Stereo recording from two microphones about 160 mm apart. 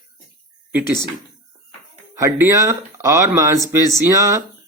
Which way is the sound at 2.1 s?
15° right (ahead or behind).